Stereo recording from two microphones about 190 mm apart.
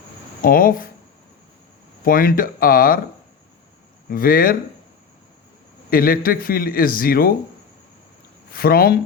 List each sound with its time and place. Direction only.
0.4 s a man's voice: 50° left (ahead or behind)
2.0 s a man's voice: 50° left (ahead or behind)
4.1 s a man's voice: 50° left (ahead or behind)
5.9 s a man's voice: 50° left (ahead or behind)
8.5 s a man's voice: 50° left (ahead or behind)